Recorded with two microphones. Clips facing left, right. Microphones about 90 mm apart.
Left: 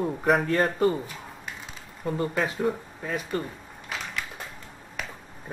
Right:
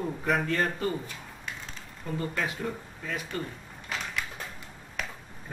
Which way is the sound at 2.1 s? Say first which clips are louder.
Left 4 dB; 30° left (ahead or behind).